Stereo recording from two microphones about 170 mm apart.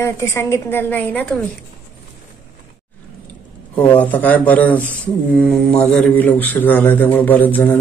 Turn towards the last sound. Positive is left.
turn(degrees=10)  # may be behind; listen again after turning